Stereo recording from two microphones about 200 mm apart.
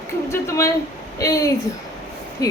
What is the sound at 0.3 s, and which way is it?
A woman's voice, 15° left (ahead or behind).